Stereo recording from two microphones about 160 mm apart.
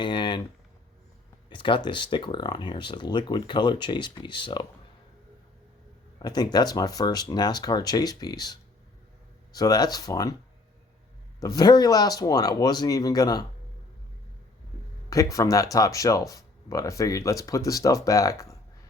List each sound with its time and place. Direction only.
0.0 s speech: 30° left (ahead or behind)
1.5 s speech: 30° left (ahead or behind)
6.1 s speech: 25° left (ahead or behind)
11.3 s speech: 25° left (ahead or behind)
15.1 s speech: 20° left (ahead or behind)